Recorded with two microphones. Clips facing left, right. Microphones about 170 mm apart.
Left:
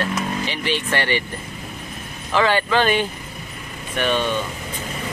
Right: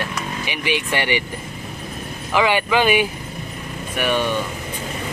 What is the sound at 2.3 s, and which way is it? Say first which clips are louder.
Speech: even; 15° right (ahead or behind).